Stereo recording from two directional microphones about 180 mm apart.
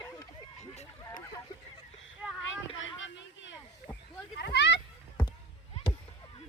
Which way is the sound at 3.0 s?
90° left.